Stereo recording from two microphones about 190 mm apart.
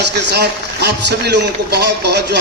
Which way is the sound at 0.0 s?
60° right (ahead or behind).